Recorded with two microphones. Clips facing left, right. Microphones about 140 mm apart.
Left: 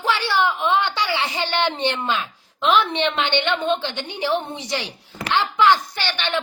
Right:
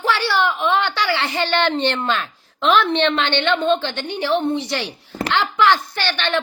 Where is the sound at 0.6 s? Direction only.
15° left (ahead or behind).